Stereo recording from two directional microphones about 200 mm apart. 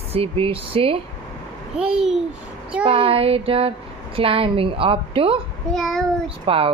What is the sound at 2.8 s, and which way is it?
Speech, 30° right (ahead or behind).